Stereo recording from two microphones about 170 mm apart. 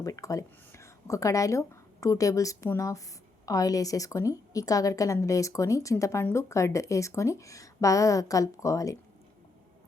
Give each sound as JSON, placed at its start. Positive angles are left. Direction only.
{"t": 0.0, "sound": "a woman's voice", "side_deg": 20}